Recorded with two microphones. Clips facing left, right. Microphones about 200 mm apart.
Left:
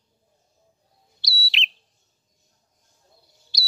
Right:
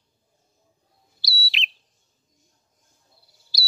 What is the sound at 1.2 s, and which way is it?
Bird, centre (ahead or behind).